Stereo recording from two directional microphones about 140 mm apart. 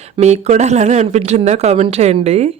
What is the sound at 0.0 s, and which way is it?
Speech, 50° right (ahead or behind).